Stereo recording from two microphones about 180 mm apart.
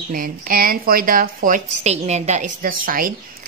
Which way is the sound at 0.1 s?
55° right (ahead or behind).